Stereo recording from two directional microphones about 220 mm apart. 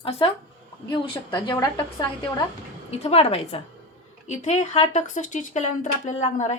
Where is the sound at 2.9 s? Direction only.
25° left (ahead or behind).